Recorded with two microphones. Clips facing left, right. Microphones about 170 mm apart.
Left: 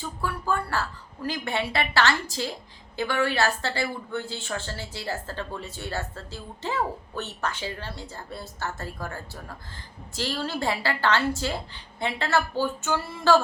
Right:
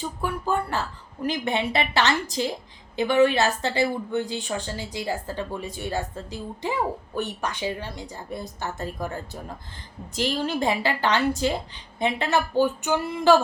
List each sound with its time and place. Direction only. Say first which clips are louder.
0.0 s a woman's voice: right 3 dB; 20° right (ahead or behind)